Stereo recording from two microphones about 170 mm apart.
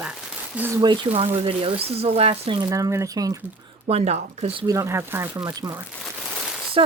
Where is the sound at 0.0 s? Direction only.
10° right (ahead or behind).